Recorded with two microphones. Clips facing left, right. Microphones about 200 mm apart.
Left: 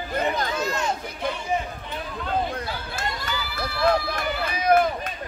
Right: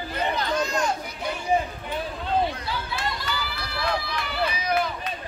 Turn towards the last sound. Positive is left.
turn(degrees=50)  # may be behind; listen again after turning